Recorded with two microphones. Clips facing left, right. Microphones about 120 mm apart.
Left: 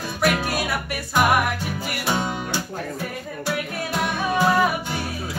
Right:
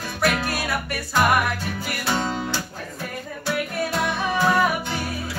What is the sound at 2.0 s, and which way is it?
Music, 10° left (ahead or behind).